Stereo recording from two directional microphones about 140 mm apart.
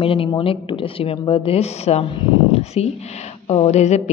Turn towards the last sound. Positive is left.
turn(degrees=50)  # may be behind; listen again after turning